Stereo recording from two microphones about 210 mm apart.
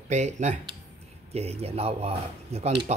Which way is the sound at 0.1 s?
35° right (ahead or behind).